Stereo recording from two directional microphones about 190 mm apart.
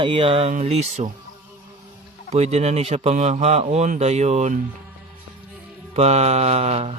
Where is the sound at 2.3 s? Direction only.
35° right (ahead or behind).